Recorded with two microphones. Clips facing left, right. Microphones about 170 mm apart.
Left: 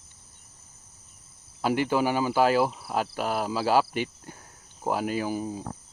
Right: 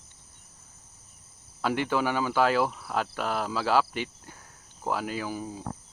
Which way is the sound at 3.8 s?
45° left (ahead or behind).